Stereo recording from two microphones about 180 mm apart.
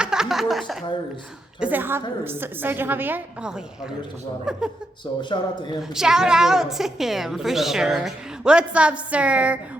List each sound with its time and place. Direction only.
0.0 s a woman's voice: 5° right (ahead or behind)
5.3 s a man's voice: 25° left (ahead or behind)
5.9 s a woman's voice: 5° right (ahead or behind)